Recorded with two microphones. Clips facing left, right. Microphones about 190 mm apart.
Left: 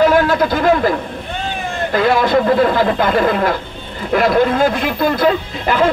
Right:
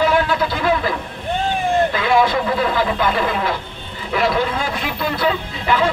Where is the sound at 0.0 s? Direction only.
45° left (ahead or behind).